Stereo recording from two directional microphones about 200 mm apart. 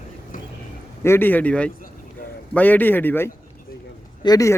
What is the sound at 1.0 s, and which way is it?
A man's voice, 10° left (ahead or behind).